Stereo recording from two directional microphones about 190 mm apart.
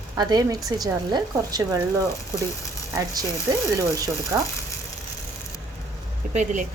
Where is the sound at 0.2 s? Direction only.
20° right (ahead or behind).